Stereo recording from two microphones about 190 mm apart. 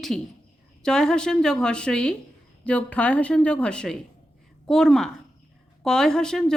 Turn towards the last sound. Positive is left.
turn(degrees=5)  # may be behind; listen again after turning